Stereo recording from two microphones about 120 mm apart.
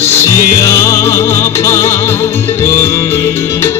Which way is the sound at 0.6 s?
25° left (ahead or behind).